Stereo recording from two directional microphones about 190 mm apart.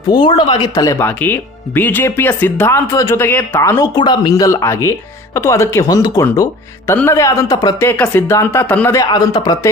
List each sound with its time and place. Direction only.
0.1 s speech: 25° left (ahead or behind)